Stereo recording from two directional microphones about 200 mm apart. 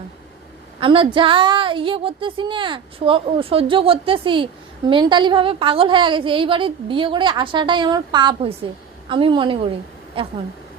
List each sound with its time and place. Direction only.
0.8 s a woman's voice: 25° right (ahead or behind)